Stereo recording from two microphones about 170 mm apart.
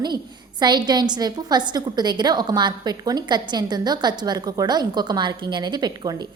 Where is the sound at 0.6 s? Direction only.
25° right (ahead or behind).